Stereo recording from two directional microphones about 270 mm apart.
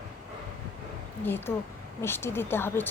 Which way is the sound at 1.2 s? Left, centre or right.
Centre.